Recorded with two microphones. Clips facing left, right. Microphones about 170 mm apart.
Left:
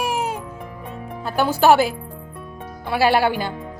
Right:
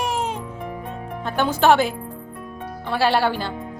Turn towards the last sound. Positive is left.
turn(degrees=10)  # may be behind; listen again after turning